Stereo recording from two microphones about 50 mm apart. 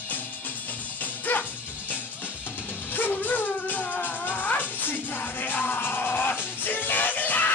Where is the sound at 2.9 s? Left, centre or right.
Left.